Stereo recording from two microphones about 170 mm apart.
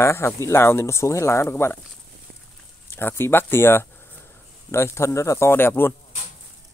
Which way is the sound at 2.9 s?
15° left (ahead or behind).